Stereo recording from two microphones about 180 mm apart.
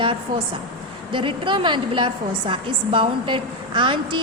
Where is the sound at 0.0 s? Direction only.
25° right (ahead or behind).